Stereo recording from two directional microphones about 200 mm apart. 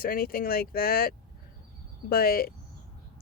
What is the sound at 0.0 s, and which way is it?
Speech, 45° left (ahead or behind).